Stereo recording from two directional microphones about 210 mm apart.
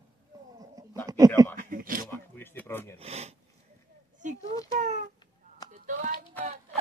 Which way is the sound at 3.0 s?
30° right (ahead or behind).